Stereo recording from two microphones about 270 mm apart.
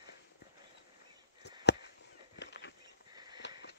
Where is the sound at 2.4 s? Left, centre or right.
Left.